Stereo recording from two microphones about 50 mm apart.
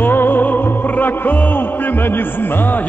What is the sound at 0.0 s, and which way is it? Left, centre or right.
Music, left.